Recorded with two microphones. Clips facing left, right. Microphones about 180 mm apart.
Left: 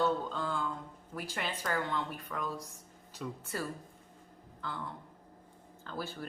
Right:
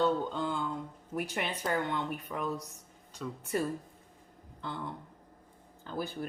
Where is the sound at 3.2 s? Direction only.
5° left (ahead or behind).